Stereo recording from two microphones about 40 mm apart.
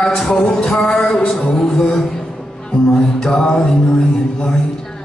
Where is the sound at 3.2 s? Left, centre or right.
Centre.